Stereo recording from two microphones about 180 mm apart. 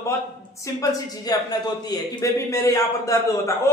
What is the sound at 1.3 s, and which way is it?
A man's voice, 20° left (ahead or behind).